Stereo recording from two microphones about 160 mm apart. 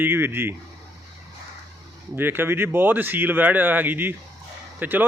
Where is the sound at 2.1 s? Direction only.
15° right (ahead or behind).